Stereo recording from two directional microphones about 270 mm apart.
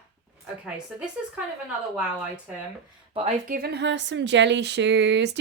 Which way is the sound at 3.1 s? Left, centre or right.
Right.